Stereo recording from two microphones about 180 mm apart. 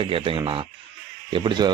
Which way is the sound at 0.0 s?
30° right (ahead or behind).